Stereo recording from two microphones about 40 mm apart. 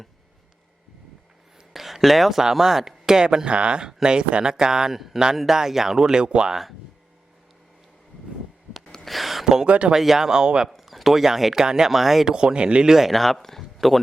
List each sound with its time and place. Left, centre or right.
1.7 s speech: centre; by 6.5 s right
9.0 s a sound: centre
9.6 s speech: right
9.9 s speech: centre
10.7 s speech: centre
12.3 s speech: right
12.9 s speech: centre